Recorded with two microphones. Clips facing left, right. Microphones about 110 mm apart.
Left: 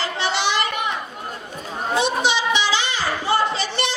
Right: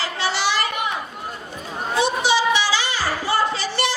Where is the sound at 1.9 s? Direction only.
20° left (ahead or behind).